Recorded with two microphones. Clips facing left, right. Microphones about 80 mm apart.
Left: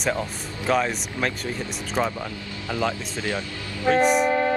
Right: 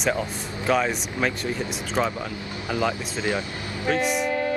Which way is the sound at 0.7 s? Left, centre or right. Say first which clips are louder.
Even; centre.